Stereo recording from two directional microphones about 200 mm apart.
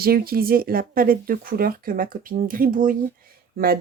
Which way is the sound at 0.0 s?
50° right (ahead or behind).